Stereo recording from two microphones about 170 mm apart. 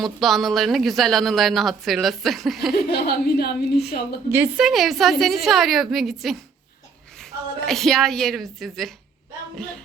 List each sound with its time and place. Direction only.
0.0 s a woman's voice: centre (ahead or behind)
2.7 s a woman's voice: 65° left (ahead or behind)
4.3 s a woman's voice: 15° right (ahead or behind)
4.6 s a woman's voice: centre (ahead or behind)